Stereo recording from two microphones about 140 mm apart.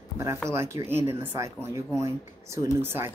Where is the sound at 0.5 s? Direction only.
20° right (ahead or behind).